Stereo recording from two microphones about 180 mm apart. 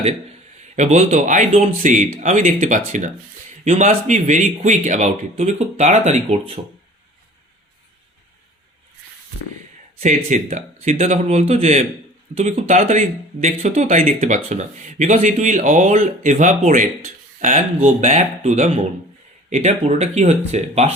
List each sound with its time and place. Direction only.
0.8 s speech: 40° right (ahead or behind)
10.0 s speech: 40° right (ahead or behind)